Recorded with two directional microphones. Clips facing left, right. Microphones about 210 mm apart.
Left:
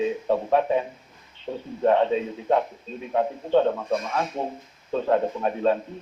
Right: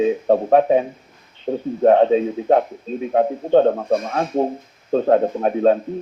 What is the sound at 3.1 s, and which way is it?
Speech, 50° right (ahead or behind).